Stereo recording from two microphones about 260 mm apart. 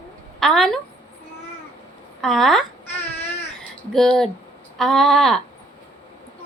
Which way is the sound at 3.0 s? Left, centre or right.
Left.